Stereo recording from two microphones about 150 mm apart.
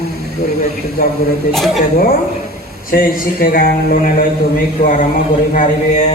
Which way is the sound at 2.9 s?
75° left (ahead or behind).